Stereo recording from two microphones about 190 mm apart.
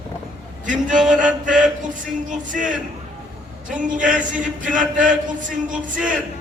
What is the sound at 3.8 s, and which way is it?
Music, 45° right (ahead or behind).